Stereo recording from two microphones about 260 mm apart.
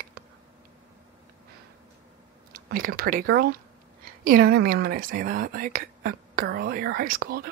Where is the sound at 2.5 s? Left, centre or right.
Right.